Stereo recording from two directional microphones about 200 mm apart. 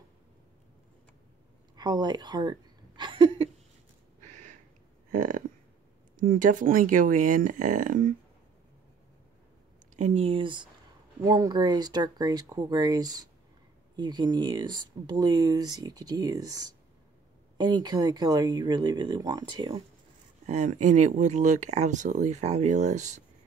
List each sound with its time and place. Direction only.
1.8 s speech: 20° right (ahead or behind)
3.0 s a sound: 25° right (ahead or behind)
4.3 s a sound: 40° right (ahead or behind)
6.1 s speech: 40° right (ahead or behind)
9.9 s speech: 35° right (ahead or behind)
20.4 s speech: 35° right (ahead or behind)